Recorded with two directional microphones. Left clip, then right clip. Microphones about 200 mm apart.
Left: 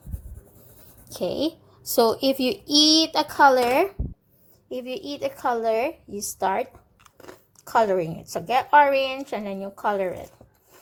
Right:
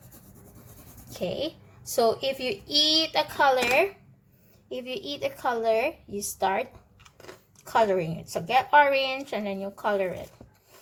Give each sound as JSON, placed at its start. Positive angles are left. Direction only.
{"t": 1.1, "sound": "a woman's voice", "side_deg": 30}